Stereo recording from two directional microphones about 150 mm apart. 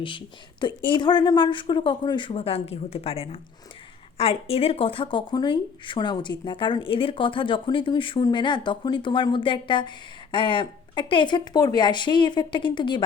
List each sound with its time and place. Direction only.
0.9 s speech: 30° left (ahead or behind)